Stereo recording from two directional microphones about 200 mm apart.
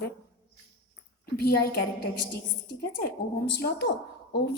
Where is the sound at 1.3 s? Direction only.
50° left (ahead or behind).